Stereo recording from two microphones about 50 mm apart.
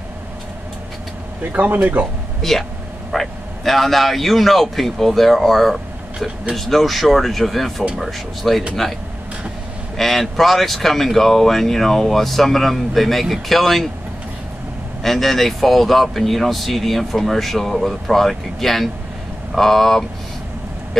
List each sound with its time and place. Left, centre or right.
1.4 s speech: right
2.4 s speech: centre
9.9 s speech: centre
15.0 s speech: centre